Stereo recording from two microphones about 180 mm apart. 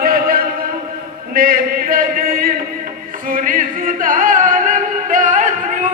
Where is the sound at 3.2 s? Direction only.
50° right (ahead or behind).